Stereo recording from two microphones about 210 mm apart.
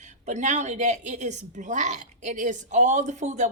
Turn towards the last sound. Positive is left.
turn(degrees=-35)  # may be behind; listen again after turning